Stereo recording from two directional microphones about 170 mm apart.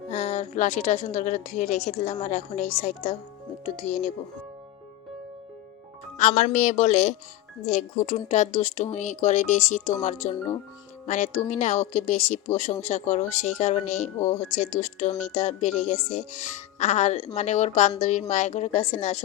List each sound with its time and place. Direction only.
0.1 s a woman's voice: 40° left (ahead or behind)
6.1 s speech: 45° left (ahead or behind)